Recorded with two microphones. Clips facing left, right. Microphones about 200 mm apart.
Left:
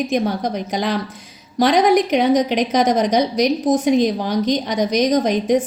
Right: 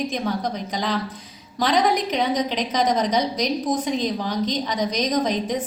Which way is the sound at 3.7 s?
80° left.